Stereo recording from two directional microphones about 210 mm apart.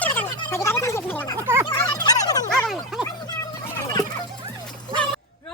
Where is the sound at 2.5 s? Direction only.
Centre (ahead or behind).